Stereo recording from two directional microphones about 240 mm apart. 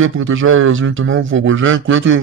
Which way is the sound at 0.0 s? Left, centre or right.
Right.